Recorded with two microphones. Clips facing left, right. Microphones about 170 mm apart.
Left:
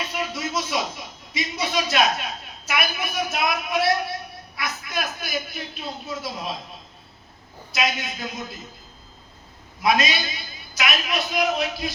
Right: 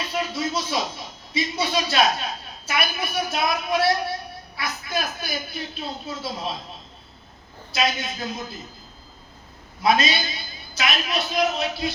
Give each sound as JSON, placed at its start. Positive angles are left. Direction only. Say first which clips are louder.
{"t": 0.1, "sound": "a sound", "louder": "right 2 dB", "side_deg": -30}
{"t": 1.3, "sound": "a man's voice", "louder": "right 3 dB", "side_deg": -30}
{"t": 7.7, "sound": "a man's voice", "louder": "right 1 dB", "side_deg": -30}
{"t": 9.8, "sound": "a man's voice", "louder": "right 1 dB", "side_deg": -30}